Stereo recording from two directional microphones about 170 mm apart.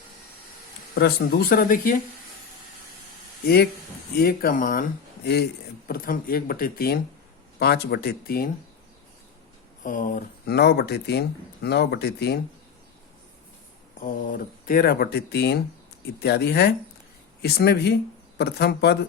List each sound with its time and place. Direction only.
0.9 s speech: 65° left (ahead or behind)
3.4 s speech: 70° left (ahead or behind)
5.9 s speech: 60° left (ahead or behind)
9.8 s speech: 50° left (ahead or behind); by 12.4 s 75° left (ahead or behind)
14.0 s speech: 55° left (ahead or behind); by 18.9 s 75° left (ahead or behind)